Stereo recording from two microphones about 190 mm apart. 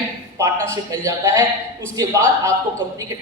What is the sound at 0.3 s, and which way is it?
A man's voice, 15° right (ahead or behind).